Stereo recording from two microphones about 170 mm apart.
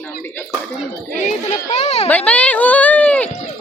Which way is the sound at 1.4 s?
40° left (ahead or behind).